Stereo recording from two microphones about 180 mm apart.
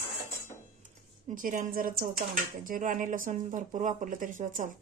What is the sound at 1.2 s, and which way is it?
Speech, 50° right (ahead or behind).